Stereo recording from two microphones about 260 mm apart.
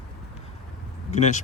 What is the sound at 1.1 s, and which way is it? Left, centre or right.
Speech, left.